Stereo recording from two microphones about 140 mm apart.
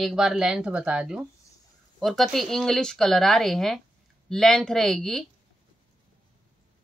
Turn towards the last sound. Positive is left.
turn(degrees=0)  # may be behind; listen again after turning